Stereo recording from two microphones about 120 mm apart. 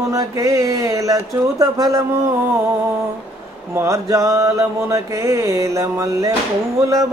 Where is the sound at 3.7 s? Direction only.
25° right (ahead or behind).